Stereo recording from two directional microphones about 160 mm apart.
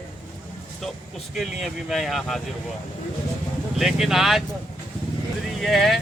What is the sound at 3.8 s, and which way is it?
Speech, centre (ahead or behind).